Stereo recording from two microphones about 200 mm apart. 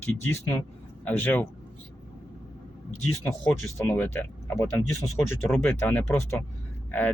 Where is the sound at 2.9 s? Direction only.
90° left.